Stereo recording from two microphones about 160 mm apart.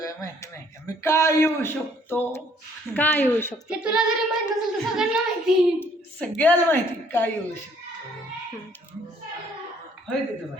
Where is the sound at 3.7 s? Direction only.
5° right (ahead or behind).